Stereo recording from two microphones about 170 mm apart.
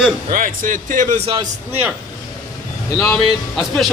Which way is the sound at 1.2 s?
30° right (ahead or behind).